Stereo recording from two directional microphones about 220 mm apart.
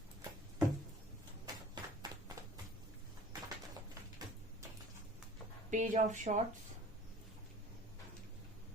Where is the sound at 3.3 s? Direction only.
15° right (ahead or behind).